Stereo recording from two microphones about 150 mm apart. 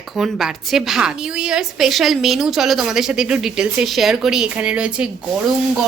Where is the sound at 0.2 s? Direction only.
Centre (ahead or behind).